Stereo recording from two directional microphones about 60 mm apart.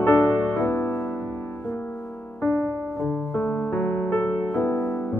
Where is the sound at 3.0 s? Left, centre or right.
Left.